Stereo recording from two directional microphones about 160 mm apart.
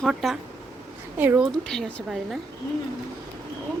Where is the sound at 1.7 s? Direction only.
Centre (ahead or behind).